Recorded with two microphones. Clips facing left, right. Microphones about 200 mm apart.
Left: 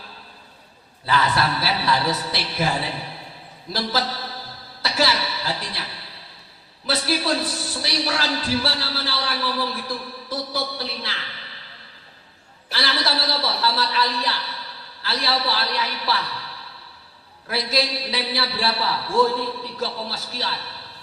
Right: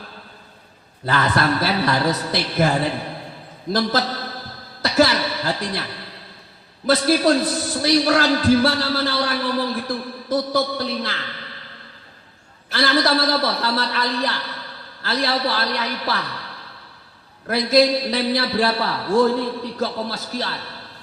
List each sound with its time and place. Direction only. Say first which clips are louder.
1.0 s a man's voice: right 2 dB; 50° right (ahead or behind)
7.1 s a man's voice: right 6 dB; 50° right (ahead or behind)
12.7 s a man's voice: right 7 dB; 50° right (ahead or behind)
17.4 s a man's voice: right 8 dB; 50° right (ahead or behind)